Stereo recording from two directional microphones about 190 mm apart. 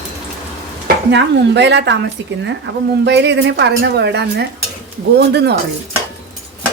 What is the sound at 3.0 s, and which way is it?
Speech, 65° right (ahead or behind).